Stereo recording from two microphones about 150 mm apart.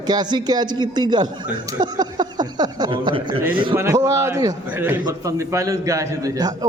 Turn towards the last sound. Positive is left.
turn(degrees=-25)  # may be behind; listen again after turning